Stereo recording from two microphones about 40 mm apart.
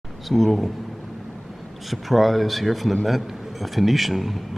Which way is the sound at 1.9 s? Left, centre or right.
Centre.